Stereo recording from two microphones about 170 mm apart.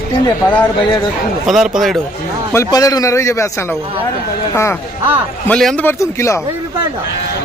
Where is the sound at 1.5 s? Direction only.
Centre (ahead or behind).